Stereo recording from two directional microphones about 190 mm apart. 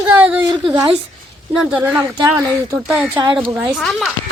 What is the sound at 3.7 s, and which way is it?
Speech, centre (ahead or behind).